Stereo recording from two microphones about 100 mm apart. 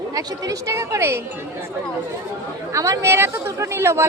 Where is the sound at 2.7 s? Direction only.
30° right (ahead or behind).